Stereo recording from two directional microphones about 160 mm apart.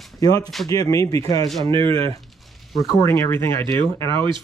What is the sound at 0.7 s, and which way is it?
Speech, 20° left (ahead or behind).